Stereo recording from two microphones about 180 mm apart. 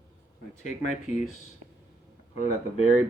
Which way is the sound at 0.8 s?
40° left (ahead or behind).